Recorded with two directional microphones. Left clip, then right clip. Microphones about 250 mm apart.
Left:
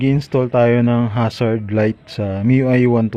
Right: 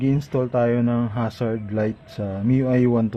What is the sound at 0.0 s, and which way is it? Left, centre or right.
Speech, left.